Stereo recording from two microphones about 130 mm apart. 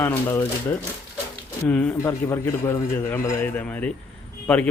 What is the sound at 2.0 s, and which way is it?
A man's voice, 25° left (ahead or behind).